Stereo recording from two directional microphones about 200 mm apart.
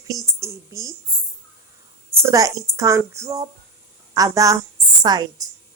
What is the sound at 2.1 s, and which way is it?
A woman's voice, 15° right (ahead or behind).